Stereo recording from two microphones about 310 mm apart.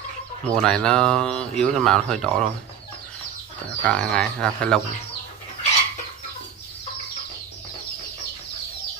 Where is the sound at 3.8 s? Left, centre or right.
Centre.